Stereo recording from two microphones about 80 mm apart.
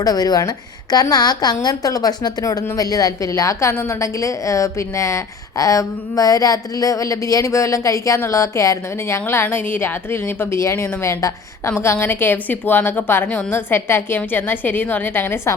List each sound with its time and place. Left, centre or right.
0.0 s a woman's voice: left